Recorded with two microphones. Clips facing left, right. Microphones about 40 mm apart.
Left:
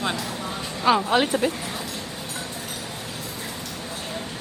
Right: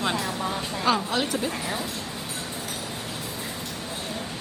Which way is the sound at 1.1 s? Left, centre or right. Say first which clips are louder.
Left 6 dB; left.